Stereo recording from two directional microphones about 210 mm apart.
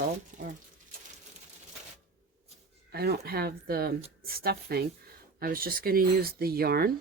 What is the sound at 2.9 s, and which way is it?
Speech, 50° right (ahead or behind).